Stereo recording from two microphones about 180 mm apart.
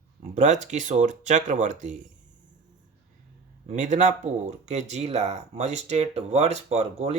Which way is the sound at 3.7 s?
40° right (ahead or behind).